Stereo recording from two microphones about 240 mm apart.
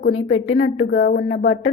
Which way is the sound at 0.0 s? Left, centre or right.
Left.